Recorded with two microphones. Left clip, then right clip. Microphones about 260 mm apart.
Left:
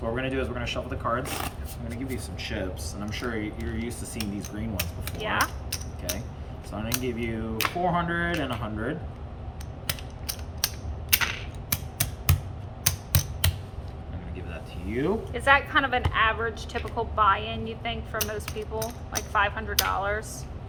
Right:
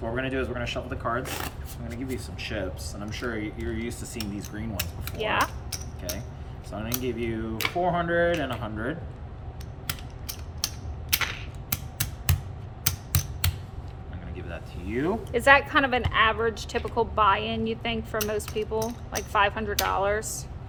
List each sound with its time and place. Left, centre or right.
0.0 s speech: centre
5.2 s a woman's voice: right
5.7 s a sound: centre
6.7 s speech: centre
9.8 s mechanisms: centre
11.1 s a sound: centre
15.3 s a woman's voice: right
19.3 s a woman's voice: right